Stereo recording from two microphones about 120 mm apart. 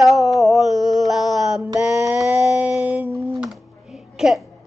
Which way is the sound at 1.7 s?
25° right (ahead or behind).